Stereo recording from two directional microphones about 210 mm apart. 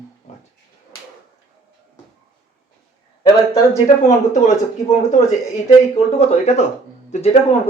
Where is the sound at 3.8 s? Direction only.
35° left (ahead or behind).